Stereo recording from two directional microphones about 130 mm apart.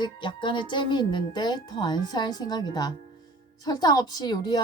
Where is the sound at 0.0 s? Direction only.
35° left (ahead or behind).